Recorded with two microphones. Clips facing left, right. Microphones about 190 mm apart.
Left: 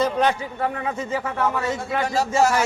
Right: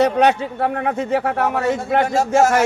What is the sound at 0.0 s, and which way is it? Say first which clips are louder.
A man's voice: right 5 dB; 70° right (ahead or behind).